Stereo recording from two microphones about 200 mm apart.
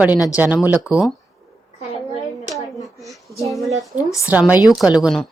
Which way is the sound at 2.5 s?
Centre (ahead or behind).